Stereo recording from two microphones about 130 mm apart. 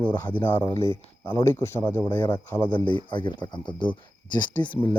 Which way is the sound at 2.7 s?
40° left (ahead or behind).